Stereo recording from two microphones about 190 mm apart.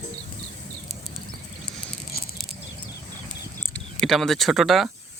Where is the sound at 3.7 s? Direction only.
Centre (ahead or behind).